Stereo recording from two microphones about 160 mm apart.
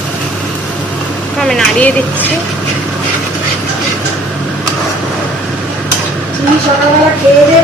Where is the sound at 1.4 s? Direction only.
5° left (ahead or behind).